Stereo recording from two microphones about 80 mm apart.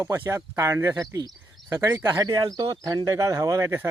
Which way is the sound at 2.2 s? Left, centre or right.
Right.